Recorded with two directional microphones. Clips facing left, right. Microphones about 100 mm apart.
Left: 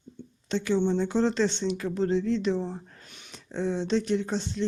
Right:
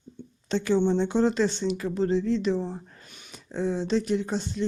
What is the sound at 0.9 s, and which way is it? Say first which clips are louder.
Speech: right 2 dB; 25° right (ahead or behind).